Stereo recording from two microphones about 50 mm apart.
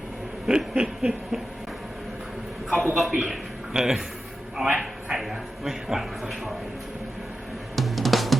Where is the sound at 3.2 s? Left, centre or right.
Centre.